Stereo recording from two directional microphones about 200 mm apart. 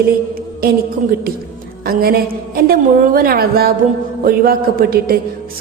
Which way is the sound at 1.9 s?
50° right (ahead or behind).